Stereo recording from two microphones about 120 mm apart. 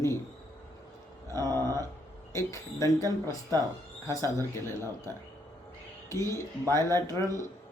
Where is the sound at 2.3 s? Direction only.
25° left (ahead or behind).